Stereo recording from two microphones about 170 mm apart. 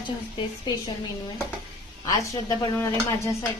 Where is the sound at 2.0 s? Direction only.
25° left (ahead or behind).